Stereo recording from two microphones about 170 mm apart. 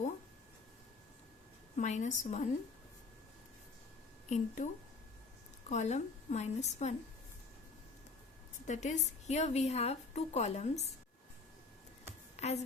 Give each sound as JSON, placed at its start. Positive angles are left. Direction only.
{"t": 1.7, "sound": "a woman's voice", "side_deg": 45}
{"t": 4.3, "sound": "a woman's voice", "side_deg": 45}
{"t": 8.6, "sound": "a woman's voice", "side_deg": 45}
{"t": 12.4, "sound": "a woman's voice", "side_deg": 40}